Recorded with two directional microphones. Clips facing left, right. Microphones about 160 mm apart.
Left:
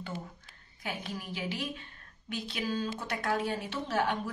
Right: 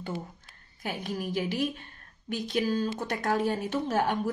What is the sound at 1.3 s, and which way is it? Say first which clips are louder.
Speech: right 7 dB; 45° right (ahead or behind).